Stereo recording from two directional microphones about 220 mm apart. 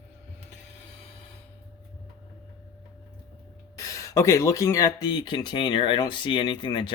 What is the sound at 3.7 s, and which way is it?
Speech, 15° left (ahead or behind).